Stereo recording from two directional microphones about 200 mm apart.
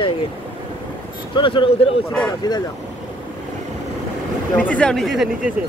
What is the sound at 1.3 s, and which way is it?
Speech, 25° left (ahead or behind).